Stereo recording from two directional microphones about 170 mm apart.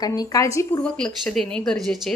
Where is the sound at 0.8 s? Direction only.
5° left (ahead or behind).